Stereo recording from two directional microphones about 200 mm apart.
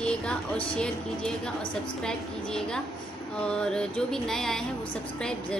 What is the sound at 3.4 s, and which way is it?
A woman's voice, 5° left (ahead or behind).